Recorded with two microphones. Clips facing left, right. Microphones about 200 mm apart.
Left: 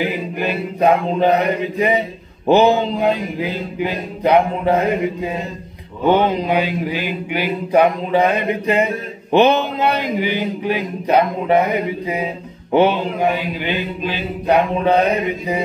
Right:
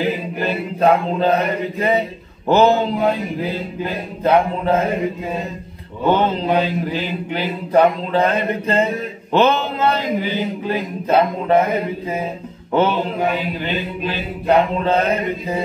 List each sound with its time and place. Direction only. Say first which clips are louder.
0.0 s mantra: even; 15° left (ahead or behind)
6.0 s mantra: left 2 dB; 15° left (ahead or behind)